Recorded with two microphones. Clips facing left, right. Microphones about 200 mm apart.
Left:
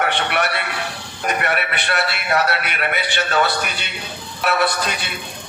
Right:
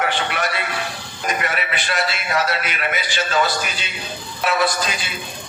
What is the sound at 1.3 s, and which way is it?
A man's voice, 60° left (ahead or behind).